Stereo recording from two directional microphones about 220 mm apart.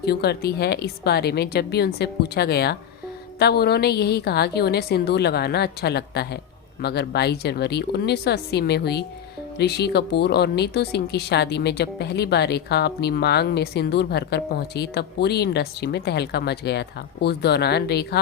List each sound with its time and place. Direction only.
0.0 s a woman's voice: 50° left (ahead or behind)